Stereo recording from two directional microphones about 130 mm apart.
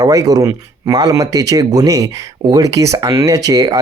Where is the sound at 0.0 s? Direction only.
30° right (ahead or behind).